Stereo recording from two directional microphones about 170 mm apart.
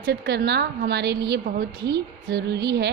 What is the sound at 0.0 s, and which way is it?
A woman's voice, 70° right (ahead or behind).